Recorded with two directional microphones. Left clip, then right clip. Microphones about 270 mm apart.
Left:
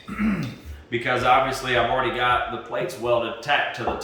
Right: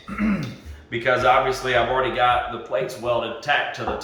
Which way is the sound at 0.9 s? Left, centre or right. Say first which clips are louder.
Right 2 dB; centre.